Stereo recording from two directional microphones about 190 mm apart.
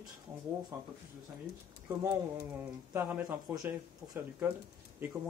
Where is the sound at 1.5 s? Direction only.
55° left (ahead or behind).